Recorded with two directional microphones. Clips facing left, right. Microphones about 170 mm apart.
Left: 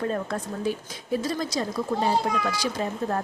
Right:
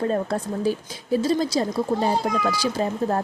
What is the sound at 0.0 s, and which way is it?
A woman's voice, 30° right (ahead or behind).